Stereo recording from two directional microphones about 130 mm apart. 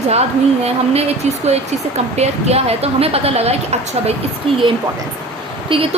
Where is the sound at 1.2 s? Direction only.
60° right (ahead or behind).